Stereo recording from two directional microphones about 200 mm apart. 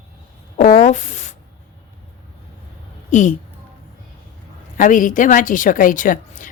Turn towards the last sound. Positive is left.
turn(degrees=40)  # may be behind; listen again after turning